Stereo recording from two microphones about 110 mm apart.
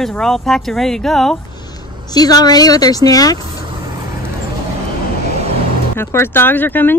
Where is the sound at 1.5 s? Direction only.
35° left (ahead or behind).